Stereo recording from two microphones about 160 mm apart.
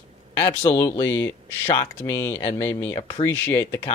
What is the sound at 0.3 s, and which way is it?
Speech, 15° left (ahead or behind).